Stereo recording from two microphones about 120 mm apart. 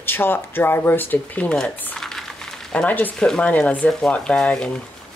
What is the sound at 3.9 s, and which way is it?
Speech, 5° left (ahead or behind).